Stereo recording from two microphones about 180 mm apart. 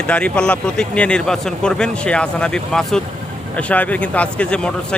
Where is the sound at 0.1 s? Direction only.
5° left (ahead or behind).